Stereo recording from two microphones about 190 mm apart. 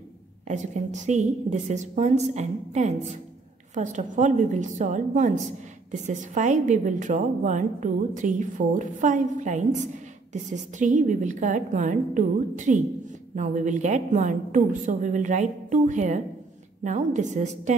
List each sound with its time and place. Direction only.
0.5 s a woman's voice: 40° right (ahead or behind)